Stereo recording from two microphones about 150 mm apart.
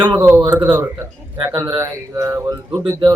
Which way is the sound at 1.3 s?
25° right (ahead or behind).